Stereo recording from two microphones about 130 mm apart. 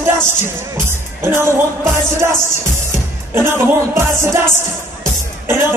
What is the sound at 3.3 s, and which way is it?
Music, 20° right (ahead or behind).